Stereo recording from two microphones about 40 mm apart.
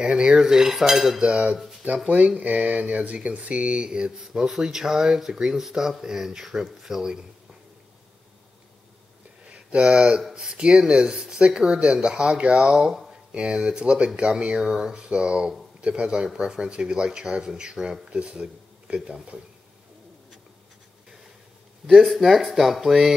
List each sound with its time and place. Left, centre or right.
0.0 s speech: right
1.2 s speech: right
1.6 s speech: centre
2.3 s speech: right
4.5 s speech: centre
9.5 s speech: right
12.5 s speech: centre
13.3 s speech: right
18.1 s a sound: right
22.0 s speech: centre